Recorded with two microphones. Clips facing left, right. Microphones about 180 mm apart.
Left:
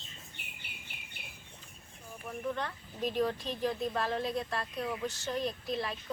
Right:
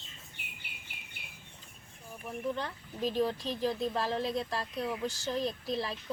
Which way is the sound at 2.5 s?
30° right (ahead or behind).